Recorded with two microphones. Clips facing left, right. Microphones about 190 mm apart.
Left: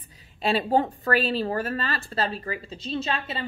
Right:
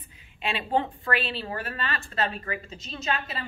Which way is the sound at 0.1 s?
40° left (ahead or behind).